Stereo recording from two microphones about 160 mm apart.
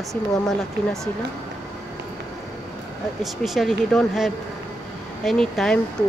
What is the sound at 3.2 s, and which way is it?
Speech, centre (ahead or behind).